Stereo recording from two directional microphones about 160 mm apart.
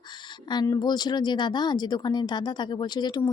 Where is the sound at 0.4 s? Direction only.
25° left (ahead or behind).